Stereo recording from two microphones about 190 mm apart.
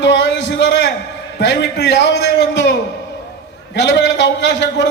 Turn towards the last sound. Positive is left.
turn(degrees=65)  # may be behind; listen again after turning